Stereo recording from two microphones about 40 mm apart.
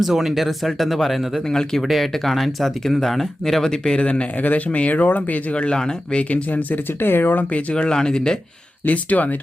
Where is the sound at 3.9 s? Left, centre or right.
Left.